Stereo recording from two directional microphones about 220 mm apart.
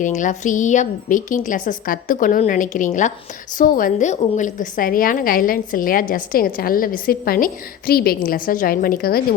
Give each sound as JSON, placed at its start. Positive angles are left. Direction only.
{"t": 0.0, "sound": "a woman's voice", "side_deg": 35}